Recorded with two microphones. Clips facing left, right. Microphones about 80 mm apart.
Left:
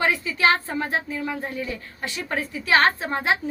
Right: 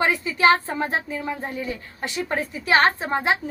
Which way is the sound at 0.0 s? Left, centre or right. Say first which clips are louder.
Right 2 dB; right.